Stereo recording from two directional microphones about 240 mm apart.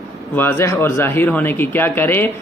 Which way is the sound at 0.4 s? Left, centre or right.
Centre.